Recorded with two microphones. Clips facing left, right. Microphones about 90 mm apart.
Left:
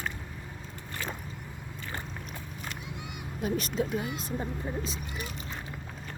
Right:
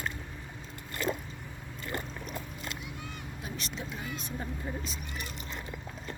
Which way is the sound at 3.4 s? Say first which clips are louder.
Left 12 dB; 45° left (ahead or behind).